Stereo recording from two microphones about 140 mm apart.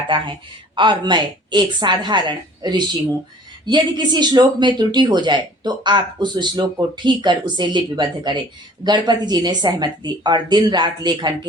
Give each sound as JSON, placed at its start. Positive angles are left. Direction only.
{"t": 0.1, "sound": "speech", "side_deg": -35}